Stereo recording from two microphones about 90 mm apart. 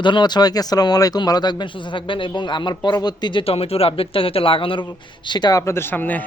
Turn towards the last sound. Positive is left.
turn(degrees=20)  # may be behind; listen again after turning